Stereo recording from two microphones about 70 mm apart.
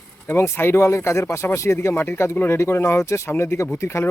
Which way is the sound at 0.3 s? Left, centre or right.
Left.